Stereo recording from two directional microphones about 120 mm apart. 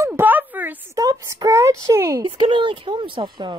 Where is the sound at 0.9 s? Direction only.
30° right (ahead or behind).